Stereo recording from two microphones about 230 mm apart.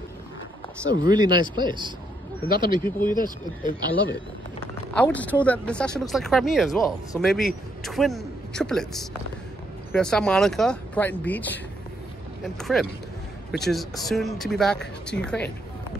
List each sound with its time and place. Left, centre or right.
1.0 s speech: centre
3.2 s speech: left
4.9 s speech: centre